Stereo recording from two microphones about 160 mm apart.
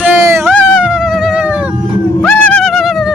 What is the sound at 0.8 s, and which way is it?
Cat, 5° right (ahead or behind).